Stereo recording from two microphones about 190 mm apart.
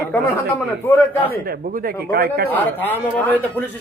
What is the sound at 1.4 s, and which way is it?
Speech, 50° right (ahead or behind).